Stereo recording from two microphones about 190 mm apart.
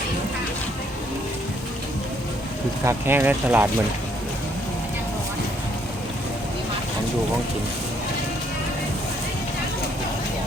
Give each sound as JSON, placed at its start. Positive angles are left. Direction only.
{"t": 2.8, "sound": "speech", "side_deg": -10}